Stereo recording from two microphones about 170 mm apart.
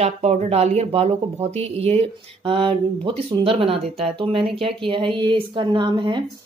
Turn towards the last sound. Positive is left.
turn(degrees=-25)  # may be behind; listen again after turning